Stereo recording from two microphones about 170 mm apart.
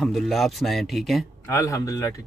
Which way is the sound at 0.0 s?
Centre (ahead or behind).